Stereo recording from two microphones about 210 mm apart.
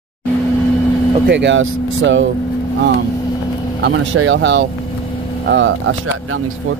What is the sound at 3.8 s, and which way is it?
Speech, 60° right (ahead or behind).